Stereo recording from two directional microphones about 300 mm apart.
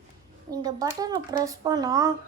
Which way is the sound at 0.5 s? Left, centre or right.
Centre.